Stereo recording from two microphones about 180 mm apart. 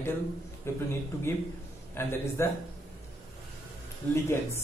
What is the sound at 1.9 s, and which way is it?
Speech, 15° left (ahead or behind).